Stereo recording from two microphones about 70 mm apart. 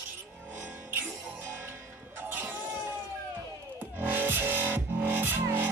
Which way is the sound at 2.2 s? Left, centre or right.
Right.